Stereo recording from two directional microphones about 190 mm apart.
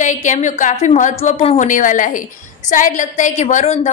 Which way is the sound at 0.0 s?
40° left (ahead or behind).